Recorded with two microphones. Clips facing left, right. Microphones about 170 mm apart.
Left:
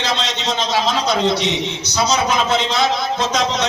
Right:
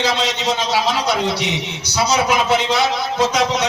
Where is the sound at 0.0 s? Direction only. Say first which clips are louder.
Right 3 dB; 10° right (ahead or behind).